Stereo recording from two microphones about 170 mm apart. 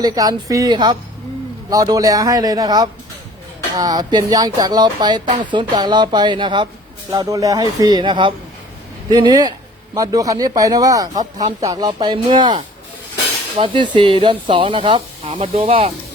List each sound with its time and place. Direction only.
0.0 s a man's voice: 20° right (ahead or behind)